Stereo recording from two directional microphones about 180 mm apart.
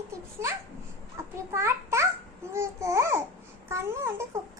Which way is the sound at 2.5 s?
15° right (ahead or behind).